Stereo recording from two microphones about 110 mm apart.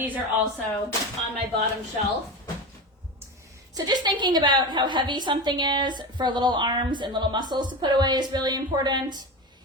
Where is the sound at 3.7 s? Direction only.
40° right (ahead or behind).